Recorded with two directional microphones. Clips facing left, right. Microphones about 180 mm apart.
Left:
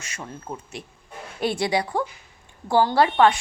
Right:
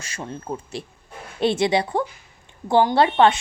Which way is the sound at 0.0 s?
30° right (ahead or behind).